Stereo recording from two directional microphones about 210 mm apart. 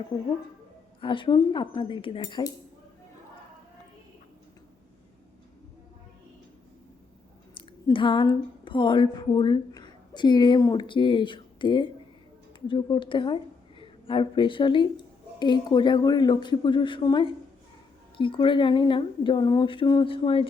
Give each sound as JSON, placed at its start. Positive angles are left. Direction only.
{"t": 0.1, "sound": "speech", "side_deg": 20}
{"t": 7.9, "sound": "a woman's voice", "side_deg": 25}